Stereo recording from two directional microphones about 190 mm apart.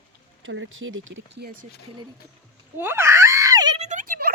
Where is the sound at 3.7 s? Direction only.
40° right (ahead or behind).